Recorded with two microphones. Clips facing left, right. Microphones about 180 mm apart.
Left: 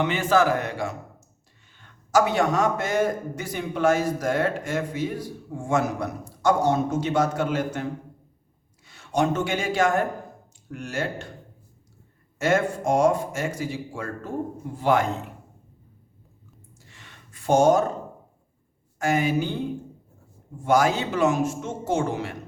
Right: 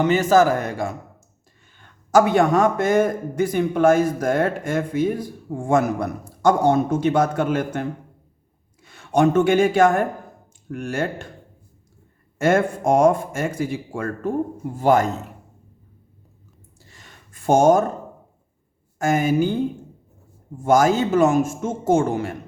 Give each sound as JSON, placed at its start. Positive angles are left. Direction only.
{"t": 0.0, "sound": "a man's voice", "side_deg": -40}
{"t": 2.1, "sound": "a man's voice", "side_deg": -55}
{"t": 12.4, "sound": "speech", "side_deg": -55}
{"t": 14.8, "sound": "a man's voice", "side_deg": -45}
{"t": 16.9, "sound": "a sound", "side_deg": -45}
{"t": 18.9, "sound": "a man's voice", "side_deg": -45}
{"t": 20.7, "sound": "a man's voice", "side_deg": -45}